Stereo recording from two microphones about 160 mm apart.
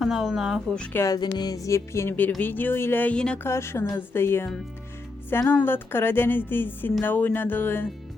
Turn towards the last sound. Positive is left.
turn(degrees=10)  # may be behind; listen again after turning